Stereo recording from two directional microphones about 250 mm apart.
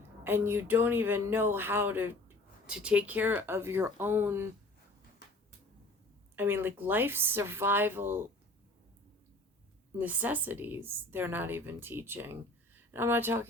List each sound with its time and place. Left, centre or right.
0.3 s a woman's voice: centre
6.3 s a woman's voice: centre
10.0 s a woman's voice: centre